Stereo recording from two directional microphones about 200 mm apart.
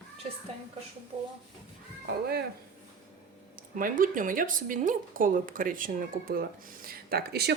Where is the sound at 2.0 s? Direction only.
55° right (ahead or behind).